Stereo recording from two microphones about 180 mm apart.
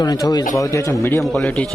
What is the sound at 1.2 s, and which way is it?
Speech, 5° left (ahead or behind).